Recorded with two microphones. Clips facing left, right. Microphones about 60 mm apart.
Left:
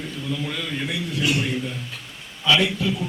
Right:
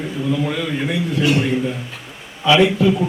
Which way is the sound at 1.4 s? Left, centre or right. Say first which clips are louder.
Right 7 dB; centre.